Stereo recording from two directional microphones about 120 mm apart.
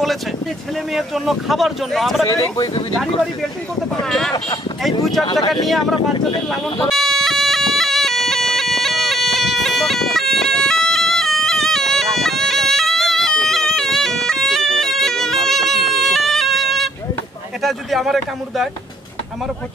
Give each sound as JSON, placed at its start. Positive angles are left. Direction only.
{"t": 0.9, "sound": "speech", "side_deg": 0}
{"t": 2.2, "sound": "speech", "side_deg": 35}
{"t": 5.2, "sound": "speech", "side_deg": 35}
{"t": 5.7, "sound": "speech", "side_deg": 0}
{"t": 6.9, "sound": "bagpipes", "side_deg": 0}
{"t": 17.6, "sound": "speech", "side_deg": 0}